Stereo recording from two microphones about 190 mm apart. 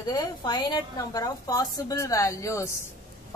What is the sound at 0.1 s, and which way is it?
A woman's voice, 20° left (ahead or behind).